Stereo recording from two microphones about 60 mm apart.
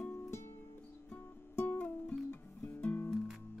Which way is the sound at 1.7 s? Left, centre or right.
Left.